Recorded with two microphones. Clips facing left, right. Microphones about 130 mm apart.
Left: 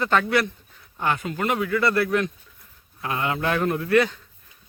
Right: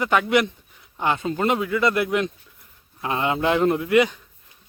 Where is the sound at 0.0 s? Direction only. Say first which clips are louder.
Right 2 dB; 15° right (ahead or behind).